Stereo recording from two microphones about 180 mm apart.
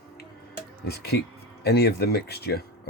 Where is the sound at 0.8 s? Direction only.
60° left (ahead or behind).